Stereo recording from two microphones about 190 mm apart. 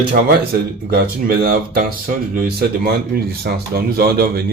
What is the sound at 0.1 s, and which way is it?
Speech, 55° right (ahead or behind).